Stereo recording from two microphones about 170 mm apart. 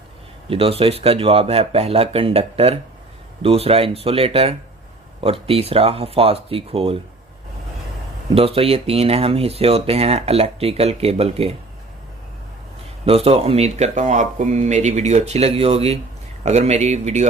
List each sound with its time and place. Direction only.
0.5 s speech: 35° right (ahead or behind)
8.4 s speech: 35° right (ahead or behind)
13.1 s speech: 35° right (ahead or behind)